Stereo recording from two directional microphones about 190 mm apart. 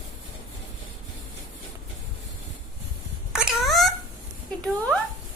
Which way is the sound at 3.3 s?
Centre (ahead or behind).